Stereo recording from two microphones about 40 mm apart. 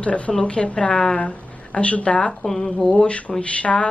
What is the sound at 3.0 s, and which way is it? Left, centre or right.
Speech, left.